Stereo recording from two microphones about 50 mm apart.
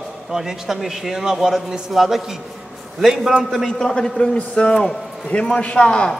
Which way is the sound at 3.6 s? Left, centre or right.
Centre.